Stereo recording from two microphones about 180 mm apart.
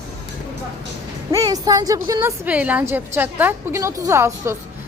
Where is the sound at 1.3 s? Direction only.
20° right (ahead or behind).